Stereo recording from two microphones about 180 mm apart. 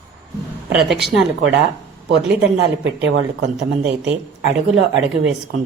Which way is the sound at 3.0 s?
80° right.